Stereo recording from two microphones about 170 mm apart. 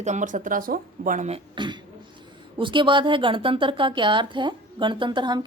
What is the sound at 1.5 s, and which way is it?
A woman's voice, 25° right (ahead or behind).